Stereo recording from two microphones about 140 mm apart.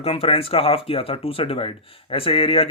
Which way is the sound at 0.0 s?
45° left (ahead or behind).